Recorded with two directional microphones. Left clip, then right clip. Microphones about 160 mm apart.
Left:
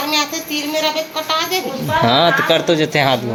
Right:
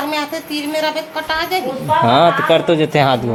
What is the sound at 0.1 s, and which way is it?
A man's voice, 25° right (ahead or behind).